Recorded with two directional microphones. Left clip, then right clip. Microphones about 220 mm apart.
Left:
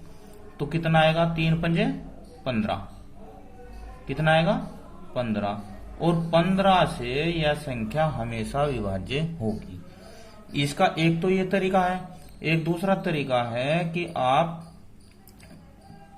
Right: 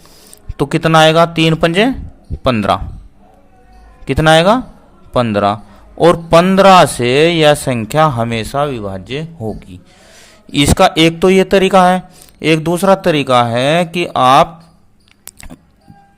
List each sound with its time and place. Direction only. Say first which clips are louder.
0.6 s a man's voice: right 13 dB; 55° right (ahead or behind)
4.0 s speech: right 13 dB; 50° right (ahead or behind); by 9.6 s 30° right (ahead or behind)
10.5 s speech: right 13 dB; 45° right (ahead or behind)